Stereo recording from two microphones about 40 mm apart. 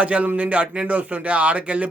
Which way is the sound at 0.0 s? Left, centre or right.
Right.